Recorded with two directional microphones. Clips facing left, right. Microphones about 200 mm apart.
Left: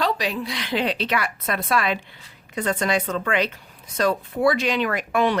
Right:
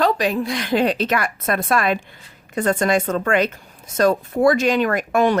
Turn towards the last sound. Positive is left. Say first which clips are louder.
# right 4 dB
turn(degrees=-45)  # may be behind; listen again after turning